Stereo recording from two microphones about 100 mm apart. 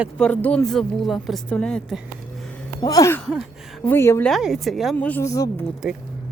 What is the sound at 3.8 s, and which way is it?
Speech, 25° left (ahead or behind).